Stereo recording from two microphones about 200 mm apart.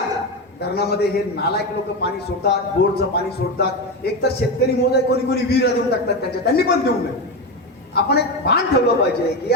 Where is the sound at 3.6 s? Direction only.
55° left (ahead or behind).